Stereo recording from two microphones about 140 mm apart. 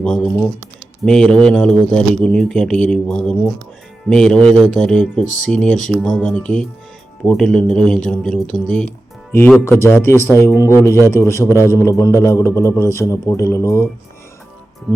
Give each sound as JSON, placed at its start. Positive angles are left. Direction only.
{"t": 0.0, "sound": "speech", "side_deg": 5}
{"t": 9.6, "sound": "a man's voice", "side_deg": 15}